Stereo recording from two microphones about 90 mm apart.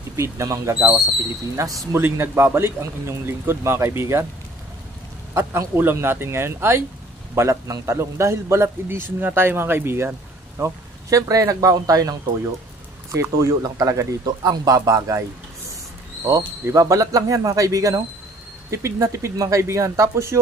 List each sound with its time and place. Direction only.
0.1 s speech: 35° right (ahead or behind)
2.0 s a man's voice: 25° right (ahead or behind)
5.3 s a man's voice: 30° right (ahead or behind)
10.6 s speech: 40° right (ahead or behind)
16.3 s speech: 35° right (ahead or behind)